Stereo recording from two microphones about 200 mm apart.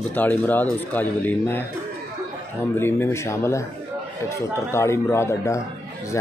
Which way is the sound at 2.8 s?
10° left (ahead or behind).